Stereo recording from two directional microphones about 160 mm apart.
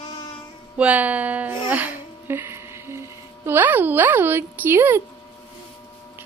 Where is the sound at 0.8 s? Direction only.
10° right (ahead or behind).